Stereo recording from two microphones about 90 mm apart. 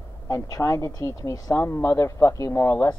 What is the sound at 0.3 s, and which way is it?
Speech, 40° left (ahead or behind).